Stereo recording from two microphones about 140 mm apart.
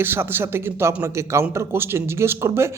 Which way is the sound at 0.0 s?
15° right (ahead or behind).